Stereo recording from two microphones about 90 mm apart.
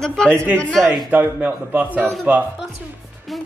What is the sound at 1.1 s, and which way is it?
Speech, 15° right (ahead or behind).